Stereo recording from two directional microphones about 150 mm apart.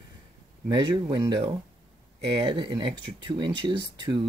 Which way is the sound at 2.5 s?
30° right (ahead or behind).